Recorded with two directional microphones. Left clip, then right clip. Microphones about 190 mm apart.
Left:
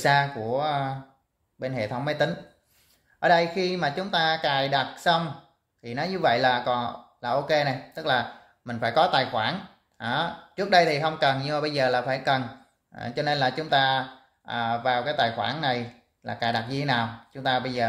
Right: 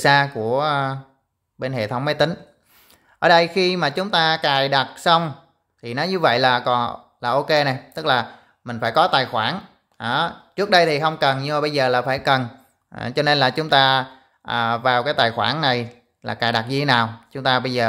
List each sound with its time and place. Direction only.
0.0 s speech: 40° right (ahead or behind)